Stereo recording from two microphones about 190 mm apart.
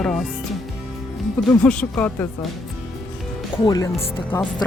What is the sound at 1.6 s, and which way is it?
Speech, 5° left (ahead or behind).